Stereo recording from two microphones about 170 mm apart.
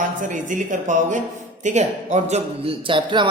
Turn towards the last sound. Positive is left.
turn(degrees=-30)  # may be behind; listen again after turning